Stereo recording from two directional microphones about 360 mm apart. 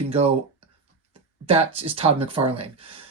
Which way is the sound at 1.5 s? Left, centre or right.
Centre.